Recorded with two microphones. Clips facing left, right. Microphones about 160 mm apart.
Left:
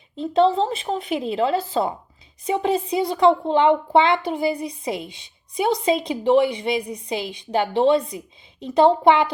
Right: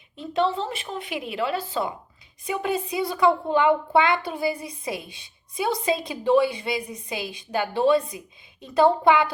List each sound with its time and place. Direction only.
0.2 s a woman's voice: 30° left (ahead or behind)